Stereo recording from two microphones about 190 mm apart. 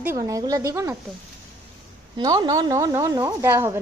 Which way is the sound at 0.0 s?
15° right (ahead or behind).